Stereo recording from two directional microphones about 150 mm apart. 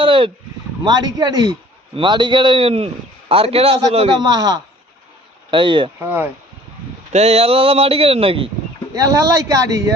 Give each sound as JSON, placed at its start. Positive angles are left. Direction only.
{"t": 0.0, "sound": "a sound", "side_deg": -35}
{"t": 0.9, "sound": "a man's voice", "side_deg": -30}
{"t": 4.2, "sound": "speech", "side_deg": -25}
{"t": 6.0, "sound": "speech", "side_deg": -10}
{"t": 7.1, "sound": "a man's voice", "side_deg": -45}
{"t": 9.0, "sound": "speech", "side_deg": -20}